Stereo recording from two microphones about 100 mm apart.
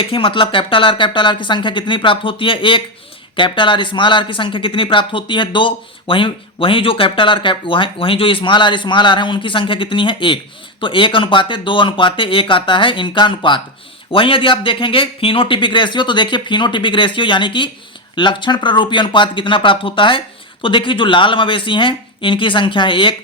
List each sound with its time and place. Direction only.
0.0 s speech: 60° left (ahead or behind)